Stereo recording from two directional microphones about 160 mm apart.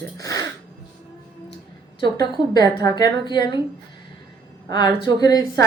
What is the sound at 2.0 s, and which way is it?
A woman's voice, 25° left (ahead or behind).